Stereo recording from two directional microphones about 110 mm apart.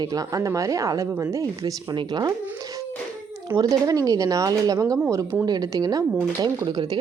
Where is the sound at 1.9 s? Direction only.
40° right (ahead or behind).